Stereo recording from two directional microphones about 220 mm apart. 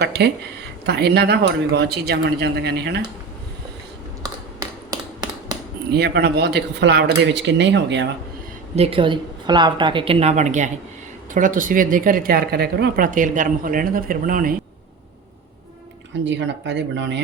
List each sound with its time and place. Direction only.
0.0 s speech: 45° right (ahead or behind)
4.9 s a sound: 20° right (ahead or behind)
5.9 s speech: 50° right (ahead or behind)
8.7 s speech: 25° right (ahead or behind)
16.2 s speech: 55° right (ahead or behind)